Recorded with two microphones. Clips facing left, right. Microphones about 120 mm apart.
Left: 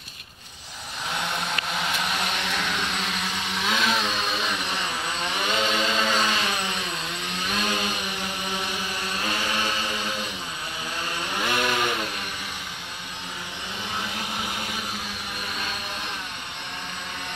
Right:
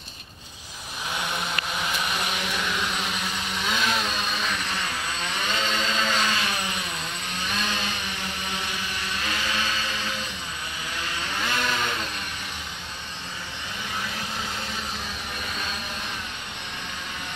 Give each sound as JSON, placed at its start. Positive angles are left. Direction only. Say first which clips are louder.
{"t": 1.9, "sound": "vehicle", "louder": "left 1 dB", "side_deg": 0}
{"t": 9.2, "sound": "a sound", "louder": "left 2 dB", "side_deg": 15}
{"t": 11.2, "sound": "chainsaw", "louder": "left 3 dB", "side_deg": 15}